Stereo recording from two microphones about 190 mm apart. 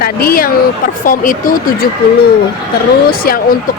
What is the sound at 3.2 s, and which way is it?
Speech, 50° left (ahead or behind).